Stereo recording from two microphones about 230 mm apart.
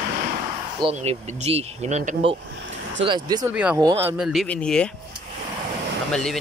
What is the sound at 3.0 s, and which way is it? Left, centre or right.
Speech, centre.